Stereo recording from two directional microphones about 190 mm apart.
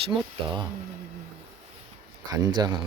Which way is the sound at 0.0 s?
25° right (ahead or behind).